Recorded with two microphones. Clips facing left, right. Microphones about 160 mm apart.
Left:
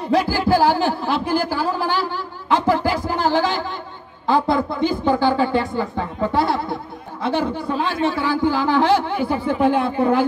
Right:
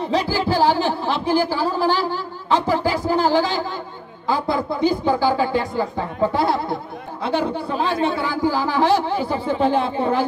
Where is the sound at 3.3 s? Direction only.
50° left (ahead or behind).